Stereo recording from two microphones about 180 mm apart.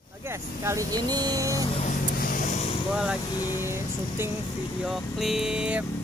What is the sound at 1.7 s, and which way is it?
Vehicle, 45° left (ahead or behind).